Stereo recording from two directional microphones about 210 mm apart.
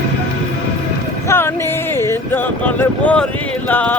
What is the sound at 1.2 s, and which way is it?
Speech, 10° left (ahead or behind).